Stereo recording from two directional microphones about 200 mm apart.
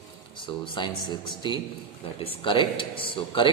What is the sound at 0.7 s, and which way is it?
A man's voice, 25° left (ahead or behind).